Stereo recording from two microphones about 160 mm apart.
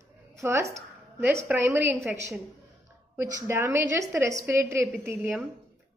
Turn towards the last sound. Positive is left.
turn(degrees=-10)  # may be behind; listen again after turning